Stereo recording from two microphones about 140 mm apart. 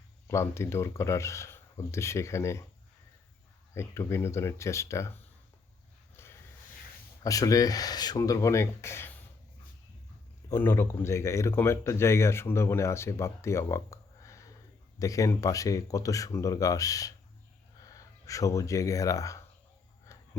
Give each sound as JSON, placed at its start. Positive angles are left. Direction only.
{"t": 0.3, "sound": "speech", "side_deg": 20}
{"t": 3.8, "sound": "speech", "side_deg": 20}
{"t": 6.2, "sound": "a sound", "side_deg": 15}
{"t": 7.2, "sound": "speech", "side_deg": 25}
{"t": 10.5, "sound": "speech", "side_deg": 15}
{"t": 20.1, "sound": "a sound", "side_deg": 20}